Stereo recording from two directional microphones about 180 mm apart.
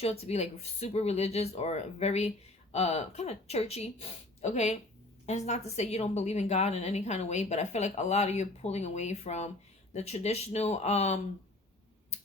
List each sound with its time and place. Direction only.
0.0 s a woman's voice: 35° left (ahead or behind)